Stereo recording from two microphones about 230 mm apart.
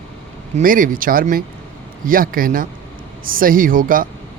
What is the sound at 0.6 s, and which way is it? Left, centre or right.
Speech, right.